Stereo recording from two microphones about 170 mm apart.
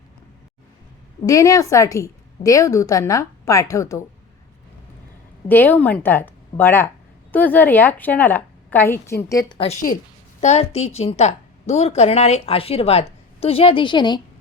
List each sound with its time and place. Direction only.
1.2 s a woman's voice: 20° left (ahead or behind)
5.5 s a woman's voice: 10° left (ahead or behind)
10.4 s a woman's voice: 40° left (ahead or behind)